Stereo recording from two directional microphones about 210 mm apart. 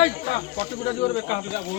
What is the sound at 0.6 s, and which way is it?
Speech, 30° left (ahead or behind).